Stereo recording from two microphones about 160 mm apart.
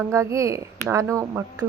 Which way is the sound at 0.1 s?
20° right (ahead or behind).